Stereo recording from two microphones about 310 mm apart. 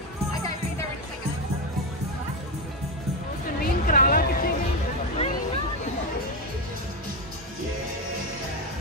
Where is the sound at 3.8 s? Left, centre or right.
Left.